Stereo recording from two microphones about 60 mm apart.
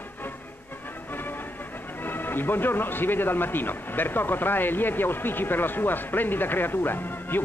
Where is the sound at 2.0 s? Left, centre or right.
Left.